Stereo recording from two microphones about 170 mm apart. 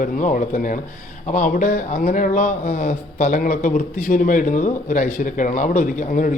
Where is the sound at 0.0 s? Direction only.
50° left (ahead or behind).